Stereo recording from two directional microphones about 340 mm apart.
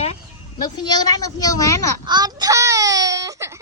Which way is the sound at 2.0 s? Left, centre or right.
Centre.